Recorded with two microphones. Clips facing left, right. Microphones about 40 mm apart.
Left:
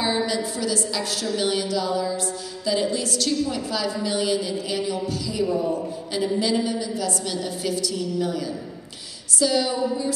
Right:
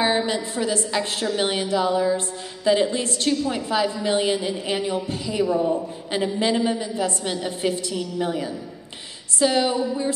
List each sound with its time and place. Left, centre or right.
0.0 s a woman's voice: right